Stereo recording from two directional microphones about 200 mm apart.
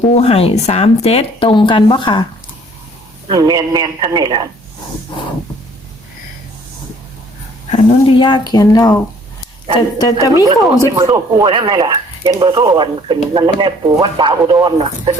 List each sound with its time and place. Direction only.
0.1 s speech: 30° left (ahead or behind)
3.2 s speech: 20° right (ahead or behind)
7.7 s speech: 25° left (ahead or behind)
10.0 s speech: 20° left (ahead or behind)
10.9 s speech: 15° right (ahead or behind)